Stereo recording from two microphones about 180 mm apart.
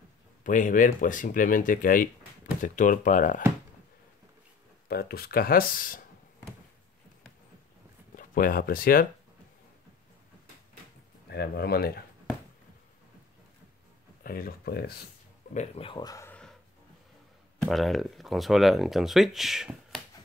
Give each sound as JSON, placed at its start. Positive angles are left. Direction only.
{"t": 0.4, "sound": "speech", "side_deg": 45}
{"t": 4.8, "sound": "speech", "side_deg": 60}
{"t": 8.2, "sound": "speech", "side_deg": 50}
{"t": 11.2, "sound": "speech", "side_deg": 65}
{"t": 14.2, "sound": "speech", "side_deg": 55}
{"t": 15.5, "sound": "speech", "side_deg": 35}
{"t": 17.6, "sound": "speech", "side_deg": 0}